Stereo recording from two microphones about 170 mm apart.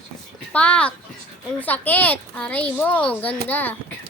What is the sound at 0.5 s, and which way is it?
A child's voice, 5° left (ahead or behind).